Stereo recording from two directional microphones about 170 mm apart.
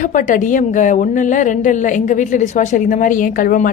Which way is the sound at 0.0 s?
50° left (ahead or behind).